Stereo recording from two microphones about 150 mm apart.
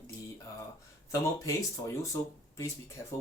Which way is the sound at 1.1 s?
20° left (ahead or behind).